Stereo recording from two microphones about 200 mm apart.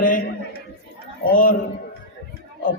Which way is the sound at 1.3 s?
45° left (ahead or behind).